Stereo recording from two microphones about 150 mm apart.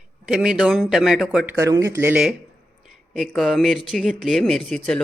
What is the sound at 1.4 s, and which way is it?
Speech, 20° right (ahead or behind).